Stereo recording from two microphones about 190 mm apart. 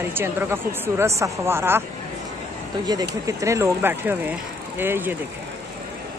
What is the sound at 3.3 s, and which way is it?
Speech, 15° right (ahead or behind).